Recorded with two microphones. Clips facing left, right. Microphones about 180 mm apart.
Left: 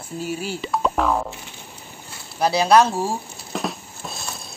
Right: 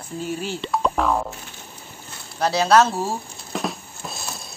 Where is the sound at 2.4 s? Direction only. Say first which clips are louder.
Left 1 dB; 10° left (ahead or behind).